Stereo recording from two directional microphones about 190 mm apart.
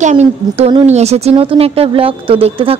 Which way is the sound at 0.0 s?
40° right (ahead or behind).